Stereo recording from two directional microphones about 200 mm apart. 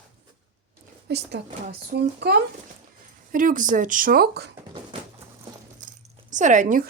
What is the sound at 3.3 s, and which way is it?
Speech, 45° right (ahead or behind).